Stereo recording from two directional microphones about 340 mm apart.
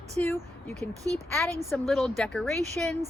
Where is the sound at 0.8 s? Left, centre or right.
Centre.